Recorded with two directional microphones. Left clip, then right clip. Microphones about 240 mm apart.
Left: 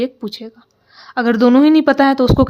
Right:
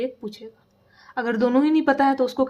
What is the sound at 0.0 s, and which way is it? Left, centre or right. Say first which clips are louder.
A woman's voice: left 7 dB; left.